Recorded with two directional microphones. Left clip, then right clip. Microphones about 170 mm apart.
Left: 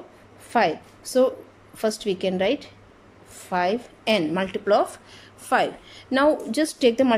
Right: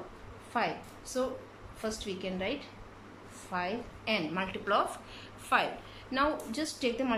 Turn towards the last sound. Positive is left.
turn(degrees=50)  # may be behind; listen again after turning